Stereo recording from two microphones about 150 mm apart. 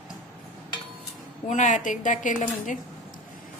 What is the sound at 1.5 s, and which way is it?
A woman's voice, 55° left (ahead or behind).